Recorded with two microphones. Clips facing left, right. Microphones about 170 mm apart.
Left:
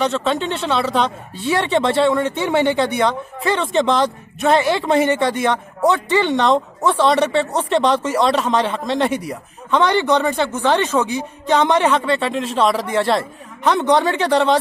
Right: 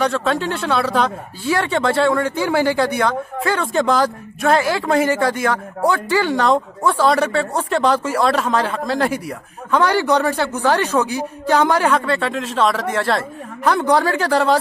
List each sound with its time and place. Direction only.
0.0 s speech: centre (ahead or behind)
1.4 s speech: 25° left (ahead or behind)
2.1 s speech: centre (ahead or behind)
4.5 s speech: 25° left (ahead or behind)
4.7 s speech: centre (ahead or behind)
5.2 s speech: 25° left (ahead or behind)
5.5 s speech: centre (ahead or behind)
6.8 s speech: 25° left (ahead or behind)
7.8 s speech: centre (ahead or behind)